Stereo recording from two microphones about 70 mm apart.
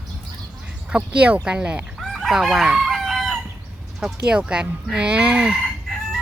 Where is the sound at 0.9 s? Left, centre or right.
Centre.